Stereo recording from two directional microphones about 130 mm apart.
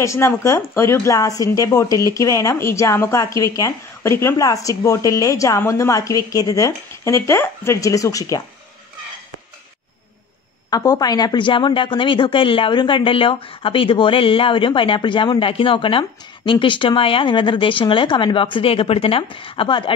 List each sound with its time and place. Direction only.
0.0 s speech: 20° left (ahead or behind)
10.7 s a woman's voice: 30° left (ahead or behind)